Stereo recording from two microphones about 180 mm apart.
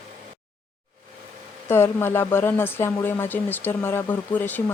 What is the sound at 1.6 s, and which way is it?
Speech, 15° left (ahead or behind).